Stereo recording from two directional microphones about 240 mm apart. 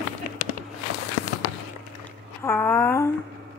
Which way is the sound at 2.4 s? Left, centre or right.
Centre.